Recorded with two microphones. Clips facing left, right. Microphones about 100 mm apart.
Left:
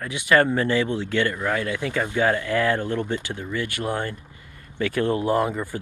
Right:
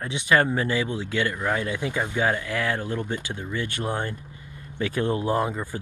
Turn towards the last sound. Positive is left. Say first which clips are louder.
# left 3 dB
turn(degrees=-15)  # may be behind; listen again after turning